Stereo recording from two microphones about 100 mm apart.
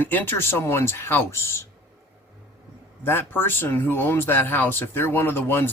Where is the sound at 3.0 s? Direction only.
20° left (ahead or behind).